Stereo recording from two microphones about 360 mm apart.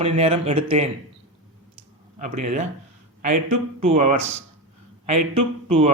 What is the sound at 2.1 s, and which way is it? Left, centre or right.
Speech, centre.